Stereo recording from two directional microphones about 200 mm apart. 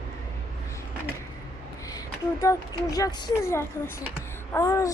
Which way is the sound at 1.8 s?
15° left (ahead or behind).